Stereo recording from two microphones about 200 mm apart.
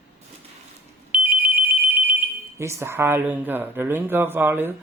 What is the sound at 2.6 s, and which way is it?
Speech, 15° right (ahead or behind).